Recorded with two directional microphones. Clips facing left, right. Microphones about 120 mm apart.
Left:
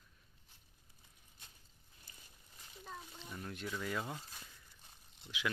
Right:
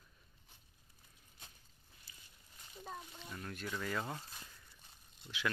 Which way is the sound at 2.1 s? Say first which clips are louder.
Left 1 dB; 45° left (ahead or behind).